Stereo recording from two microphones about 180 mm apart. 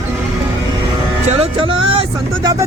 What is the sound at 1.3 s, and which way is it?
Speech, 35° right (ahead or behind).